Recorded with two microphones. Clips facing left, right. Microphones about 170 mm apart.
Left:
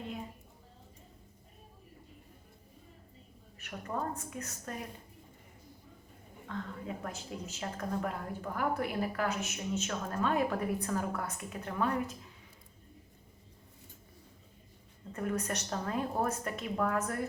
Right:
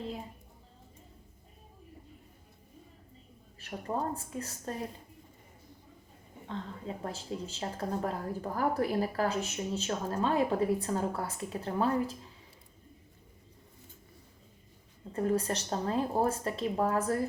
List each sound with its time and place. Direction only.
3.6 s a woman's voice: 30° right (ahead or behind)
6.5 s a woman's voice: 30° right (ahead or behind)
15.1 s a woman's voice: 30° right (ahead or behind)